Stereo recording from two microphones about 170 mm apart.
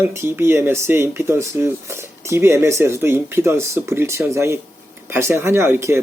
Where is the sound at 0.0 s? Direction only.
15° right (ahead or behind).